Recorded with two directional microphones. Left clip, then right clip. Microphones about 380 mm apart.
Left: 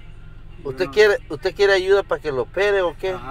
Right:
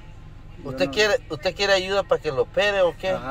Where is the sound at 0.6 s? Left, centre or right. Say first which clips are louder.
Left 5 dB; centre.